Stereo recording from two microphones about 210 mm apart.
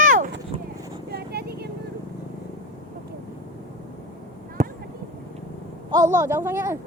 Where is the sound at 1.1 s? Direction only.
50° right (ahead or behind).